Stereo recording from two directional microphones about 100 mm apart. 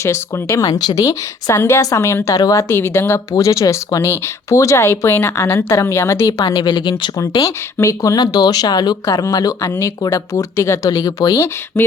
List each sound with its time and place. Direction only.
0.0 s speech: 25° left (ahead or behind)
0.6 s speech: 40° left (ahead or behind)
6.4 s speech: 50° left (ahead or behind)
7.4 s speech: 30° left (ahead or behind)
11.8 s a sound: 25° left (ahead or behind)